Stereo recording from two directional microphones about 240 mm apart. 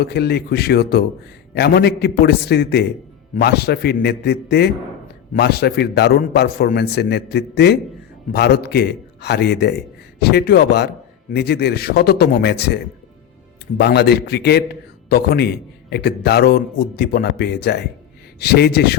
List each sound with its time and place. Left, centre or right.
0.0 s a man's voice: left